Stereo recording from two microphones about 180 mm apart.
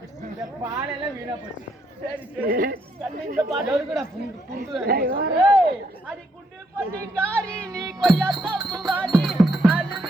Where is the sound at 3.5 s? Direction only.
Centre (ahead or behind).